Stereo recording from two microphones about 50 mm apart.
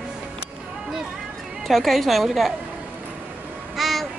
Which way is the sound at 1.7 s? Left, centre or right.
Centre.